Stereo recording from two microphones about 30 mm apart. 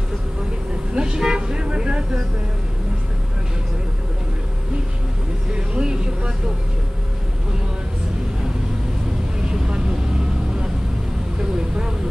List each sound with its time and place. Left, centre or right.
0.9 s toot: right
5.5 s vehicle: right
9.7 s vehicle: right